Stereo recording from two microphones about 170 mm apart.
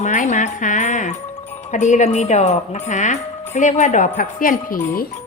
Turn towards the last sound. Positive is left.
turn(degrees=55)  # may be behind; listen again after turning